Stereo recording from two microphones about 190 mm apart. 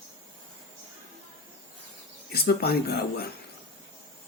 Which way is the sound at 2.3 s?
55° left (ahead or behind).